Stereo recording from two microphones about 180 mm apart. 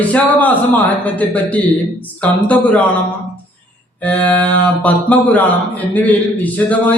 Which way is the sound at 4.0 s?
10° left (ahead or behind).